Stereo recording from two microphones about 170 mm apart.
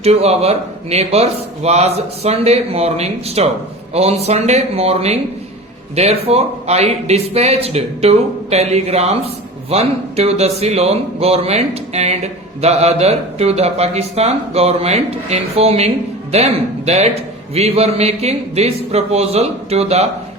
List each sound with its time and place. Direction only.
0.0 s speech: 40° right (ahead or behind)